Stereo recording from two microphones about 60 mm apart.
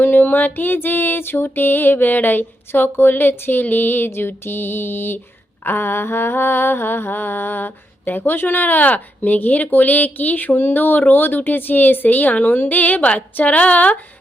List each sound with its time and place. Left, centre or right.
0.0 s mantra: left